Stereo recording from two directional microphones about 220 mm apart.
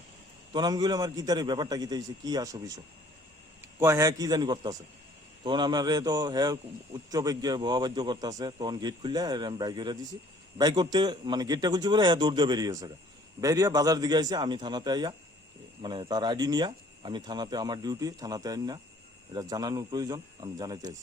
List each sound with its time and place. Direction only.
0.5 s a man's voice: 20° right (ahead or behind)